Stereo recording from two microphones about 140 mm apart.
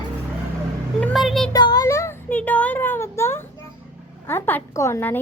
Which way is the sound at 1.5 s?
30° left (ahead or behind).